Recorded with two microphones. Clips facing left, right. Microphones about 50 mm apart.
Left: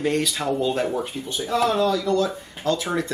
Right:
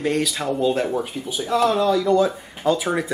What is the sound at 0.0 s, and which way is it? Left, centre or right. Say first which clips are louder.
Speech: right 1 dB; centre.